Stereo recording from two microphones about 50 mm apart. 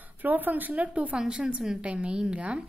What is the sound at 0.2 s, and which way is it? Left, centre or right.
Speech, right.